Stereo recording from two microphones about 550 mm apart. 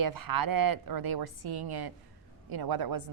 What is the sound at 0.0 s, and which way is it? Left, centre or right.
A woman's voice, right.